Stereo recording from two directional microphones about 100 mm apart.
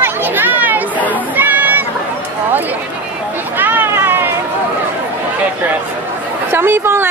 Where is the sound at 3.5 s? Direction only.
20° right (ahead or behind).